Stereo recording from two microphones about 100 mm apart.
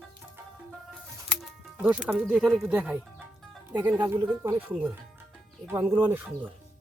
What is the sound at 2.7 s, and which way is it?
Speech, 15° right (ahead or behind).